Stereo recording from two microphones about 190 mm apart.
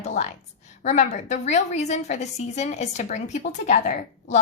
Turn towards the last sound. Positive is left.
turn(degrees=40)  # may be behind; listen again after turning